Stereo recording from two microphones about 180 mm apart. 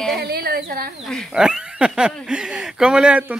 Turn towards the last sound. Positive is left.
turn(degrees=-5)  # may be behind; listen again after turning